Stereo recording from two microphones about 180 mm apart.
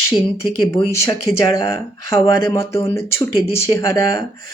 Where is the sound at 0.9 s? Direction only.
15° left (ahead or behind).